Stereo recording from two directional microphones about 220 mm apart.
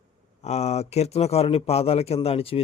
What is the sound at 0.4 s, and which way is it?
A man's voice, 30° left (ahead or behind).